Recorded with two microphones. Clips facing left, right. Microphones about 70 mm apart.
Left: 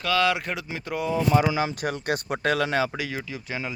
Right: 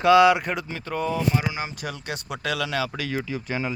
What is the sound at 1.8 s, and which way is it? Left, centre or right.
Speech, left.